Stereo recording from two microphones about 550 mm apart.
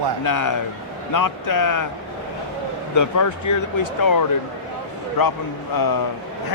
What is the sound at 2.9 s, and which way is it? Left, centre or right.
Speech, left.